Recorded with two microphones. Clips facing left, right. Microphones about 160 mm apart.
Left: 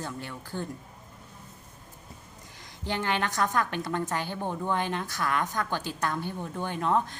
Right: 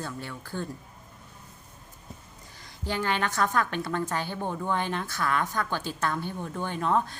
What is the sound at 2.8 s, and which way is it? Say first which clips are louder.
A woman's voice: right 1 dB; 20° left (ahead or behind).